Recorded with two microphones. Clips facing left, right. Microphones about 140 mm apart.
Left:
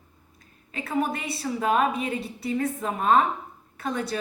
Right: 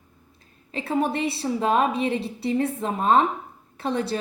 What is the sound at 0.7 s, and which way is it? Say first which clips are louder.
A woman's voice: right 3 dB; 30° right (ahead or behind).